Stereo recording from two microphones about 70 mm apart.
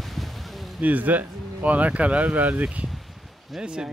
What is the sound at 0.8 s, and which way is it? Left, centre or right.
Speech, right.